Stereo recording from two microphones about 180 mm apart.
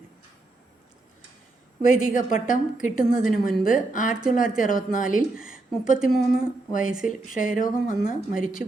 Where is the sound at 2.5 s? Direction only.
45° left (ahead or behind).